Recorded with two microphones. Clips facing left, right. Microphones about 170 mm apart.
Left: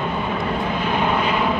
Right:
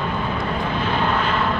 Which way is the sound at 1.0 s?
10° left (ahead or behind).